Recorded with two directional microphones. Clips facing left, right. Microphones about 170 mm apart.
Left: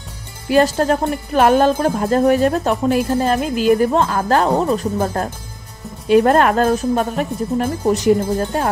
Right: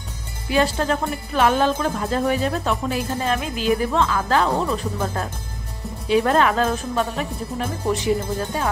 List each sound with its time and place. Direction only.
0.5 s speech: 45° left (ahead or behind)